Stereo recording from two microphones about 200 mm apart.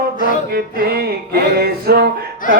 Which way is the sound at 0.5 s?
50° right (ahead or behind).